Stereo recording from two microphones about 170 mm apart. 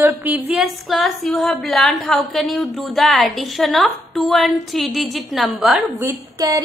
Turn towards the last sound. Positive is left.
turn(degrees=-15)  # may be behind; listen again after turning